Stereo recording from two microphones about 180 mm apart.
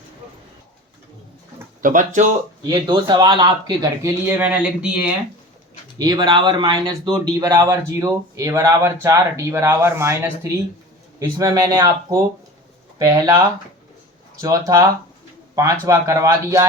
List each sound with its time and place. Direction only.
1.8 s speech: 45° right (ahead or behind)
2.6 s speech: 25° right (ahead or behind); by 5.1 s 5° right (ahead or behind)
6.0 s speech: 20° right (ahead or behind)
14.4 s speech: 20° right (ahead or behind)